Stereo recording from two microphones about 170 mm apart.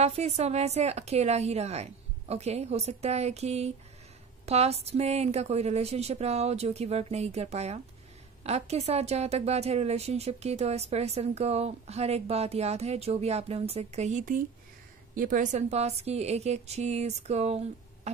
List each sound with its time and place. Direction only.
0.0 s a woman's voice: 35° right (ahead or behind)